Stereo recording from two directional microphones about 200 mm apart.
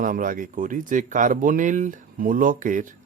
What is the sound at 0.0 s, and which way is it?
Speech, 40° right (ahead or behind).